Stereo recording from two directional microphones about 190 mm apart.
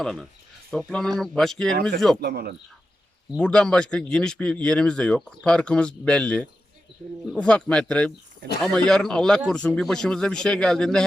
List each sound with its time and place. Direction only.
0.0 s speech: centre (ahead or behind)
2.2 s speech: 55° right (ahead or behind)
3.3 s speech: 5° left (ahead or behind)